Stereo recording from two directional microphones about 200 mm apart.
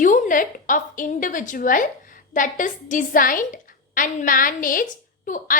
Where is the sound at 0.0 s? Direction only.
40° left (ahead or behind).